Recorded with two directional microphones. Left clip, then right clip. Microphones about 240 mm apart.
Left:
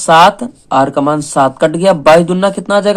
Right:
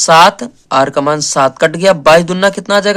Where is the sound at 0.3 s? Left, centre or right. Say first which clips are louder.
Left 1 dB; right.